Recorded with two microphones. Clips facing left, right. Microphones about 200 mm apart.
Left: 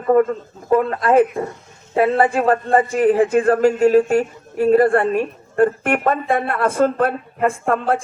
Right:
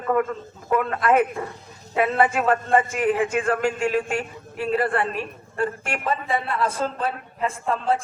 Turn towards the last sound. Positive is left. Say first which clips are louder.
# left 5 dB
turn(degrees=60)  # may be behind; listen again after turning